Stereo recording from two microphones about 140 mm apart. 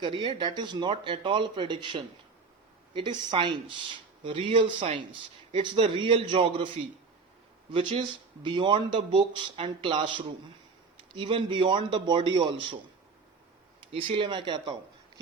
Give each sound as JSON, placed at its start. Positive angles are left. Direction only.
{"t": 0.0, "sound": "speech", "side_deg": -35}
{"t": 7.7, "sound": "speech", "side_deg": -40}
{"t": 13.9, "sound": "speech", "side_deg": -40}